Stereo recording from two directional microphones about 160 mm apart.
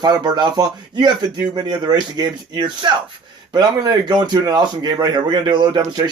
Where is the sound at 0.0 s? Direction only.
25° right (ahead or behind).